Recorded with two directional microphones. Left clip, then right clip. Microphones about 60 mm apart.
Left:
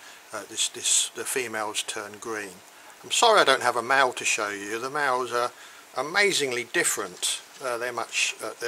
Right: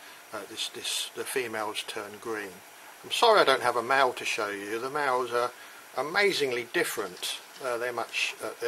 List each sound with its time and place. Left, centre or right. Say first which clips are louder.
0.3 s speech: left 5 dB; left